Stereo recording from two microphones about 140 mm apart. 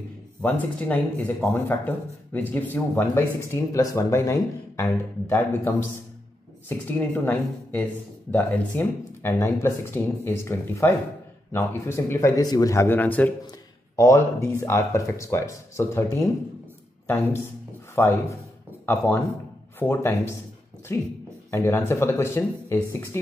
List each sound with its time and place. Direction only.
0.4 s speech: 10° left (ahead or behind)
7.0 s speech: 10° left (ahead or behind)
17.9 s speech: 15° left (ahead or behind)